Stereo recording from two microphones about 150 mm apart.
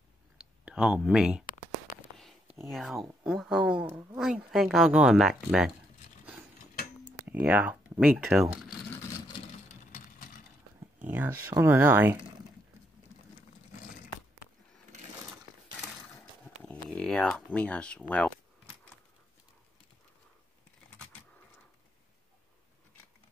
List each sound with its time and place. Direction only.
0.4 s speech: 5° right (ahead or behind)
1.4 s a sound: 65° left (ahead or behind)
2.7 s speech: centre (ahead or behind)
7.2 s speech: 10° right (ahead or behind)
9.9 s vehicle: 65° left (ahead or behind)
11.1 s speech: 15° right (ahead or behind)
16.6 s speech: 10° left (ahead or behind)